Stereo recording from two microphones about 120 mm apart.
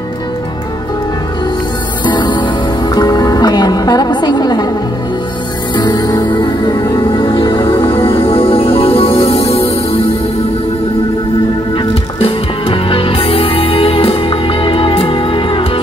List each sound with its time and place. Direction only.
2.0 s music: 40° left (ahead or behind)
5.8 s music: 35° left (ahead or behind); by 9.7 s 55° left (ahead or behind)
12.2 s music: 50° left (ahead or behind)